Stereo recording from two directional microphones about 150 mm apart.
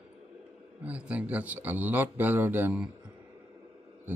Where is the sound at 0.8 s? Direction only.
10° right (ahead or behind).